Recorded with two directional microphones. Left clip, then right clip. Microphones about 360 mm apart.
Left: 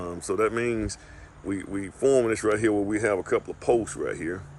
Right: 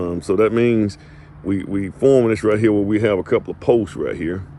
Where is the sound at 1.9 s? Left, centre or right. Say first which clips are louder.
Right 7 dB; centre.